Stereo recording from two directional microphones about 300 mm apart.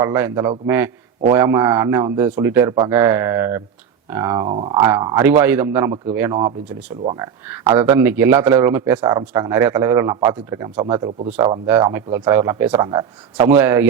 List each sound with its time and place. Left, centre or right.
0.0 s speech: centre